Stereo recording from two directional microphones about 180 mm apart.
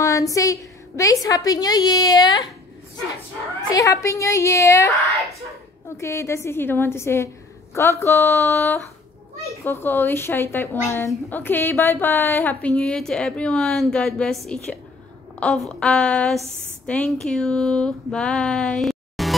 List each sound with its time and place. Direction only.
0.0 s a woman's voice: 20° left (ahead or behind)
3.7 s speech: 15° left (ahead or behind)
4.9 s a woman's voice: centre (ahead or behind)
5.9 s speech: 15° left (ahead or behind)
15.4 s a woman's voice: 5° left (ahead or behind)